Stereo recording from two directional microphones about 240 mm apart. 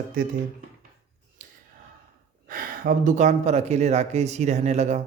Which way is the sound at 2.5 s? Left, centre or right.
Right.